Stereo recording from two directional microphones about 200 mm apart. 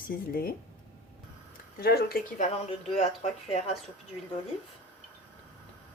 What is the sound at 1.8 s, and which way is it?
Speech, 50° left (ahead or behind).